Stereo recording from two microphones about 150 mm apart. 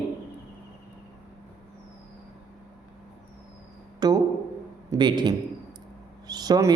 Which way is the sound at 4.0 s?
25° right (ahead or behind).